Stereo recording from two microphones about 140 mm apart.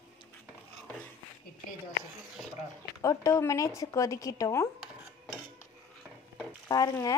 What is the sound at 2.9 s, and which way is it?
A woman's voice, 25° left (ahead or behind).